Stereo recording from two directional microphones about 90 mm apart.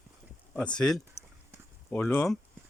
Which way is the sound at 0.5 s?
10° left (ahead or behind).